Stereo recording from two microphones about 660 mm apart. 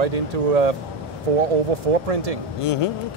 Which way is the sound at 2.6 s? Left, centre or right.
Left.